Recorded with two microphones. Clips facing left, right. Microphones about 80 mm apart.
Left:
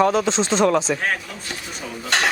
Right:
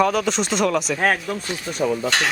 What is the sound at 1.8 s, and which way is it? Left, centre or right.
Cutlery, right.